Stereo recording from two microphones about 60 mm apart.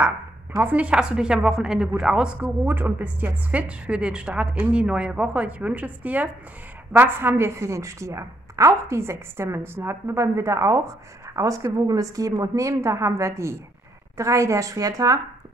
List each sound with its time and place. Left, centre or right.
0.6 s a woman's voice: right
2.4 s a woman's voice: right
7.0 s a woman's voice: right